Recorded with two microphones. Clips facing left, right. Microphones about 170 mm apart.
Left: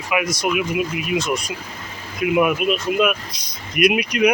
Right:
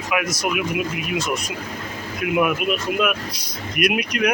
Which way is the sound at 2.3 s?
Centre (ahead or behind).